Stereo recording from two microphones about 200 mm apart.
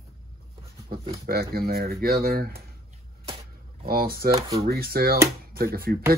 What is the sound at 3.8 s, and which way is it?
Speech, 50° right (ahead or behind).